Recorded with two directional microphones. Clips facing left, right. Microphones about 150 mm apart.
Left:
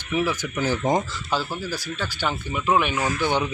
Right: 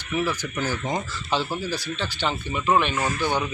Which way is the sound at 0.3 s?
5° left (ahead or behind).